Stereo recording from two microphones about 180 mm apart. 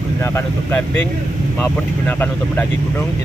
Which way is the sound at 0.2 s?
15° left (ahead or behind).